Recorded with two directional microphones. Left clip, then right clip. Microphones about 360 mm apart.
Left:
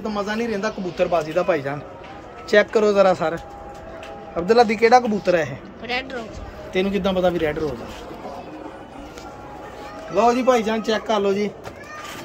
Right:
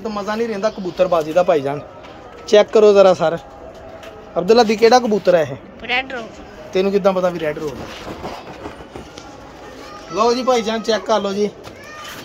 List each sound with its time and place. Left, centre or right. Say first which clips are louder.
0.0 s speech: right 3 dB; centre
0.9 s a man's voice: right 5 dB; centre
4.4 s a man's voice: right 3 dB; right
5.9 s speech: right 6 dB; centre
10.1 s speech: right 1 dB; centre